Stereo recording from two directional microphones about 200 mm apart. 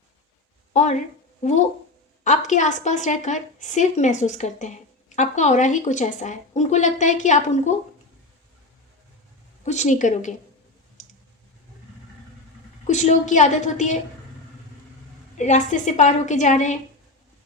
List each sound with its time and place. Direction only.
0.7 s a woman's voice: 35° left (ahead or behind)
9.6 s a woman's voice: 35° left (ahead or behind)
11.0 s clicking: 40° left (ahead or behind)
12.9 s a woman's voice: 35° left (ahead or behind)
15.4 s a woman's voice: 35° left (ahead or behind)